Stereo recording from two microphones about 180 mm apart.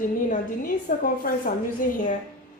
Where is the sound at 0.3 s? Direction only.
50° left (ahead or behind).